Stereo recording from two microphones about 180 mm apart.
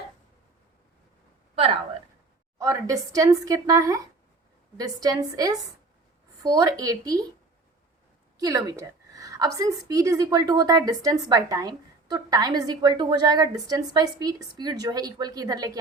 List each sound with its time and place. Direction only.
1.5 s a woman's voice: 30° right (ahead or behind)
2.6 s a woman's voice: 20° right (ahead or behind)
8.4 s a woman's voice: 20° right (ahead or behind)